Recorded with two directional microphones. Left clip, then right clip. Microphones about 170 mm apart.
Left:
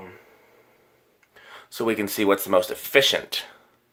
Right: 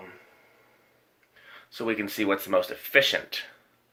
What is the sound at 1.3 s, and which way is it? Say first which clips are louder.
Speech: left 4 dB; 40° left (ahead or behind).